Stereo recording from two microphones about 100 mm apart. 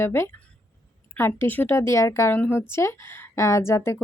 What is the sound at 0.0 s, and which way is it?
A woman's voice, 25° left (ahead or behind).